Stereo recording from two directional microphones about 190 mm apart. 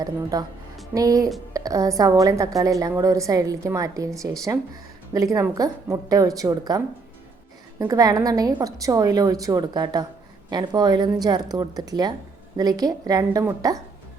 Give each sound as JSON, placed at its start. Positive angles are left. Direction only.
{"t": 0.0, "sound": "a woman's voice", "side_deg": -20}